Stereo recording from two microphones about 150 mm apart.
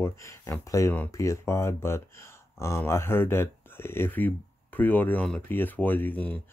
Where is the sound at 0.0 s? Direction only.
20° left (ahead or behind).